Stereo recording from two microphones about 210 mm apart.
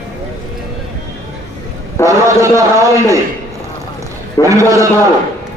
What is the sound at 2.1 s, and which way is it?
A man's voice, 15° right (ahead or behind).